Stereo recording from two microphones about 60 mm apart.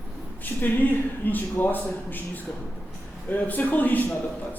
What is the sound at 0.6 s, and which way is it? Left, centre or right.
A man's voice, left.